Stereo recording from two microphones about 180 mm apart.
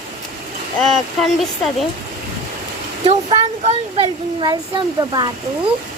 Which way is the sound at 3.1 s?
35° right (ahead or behind).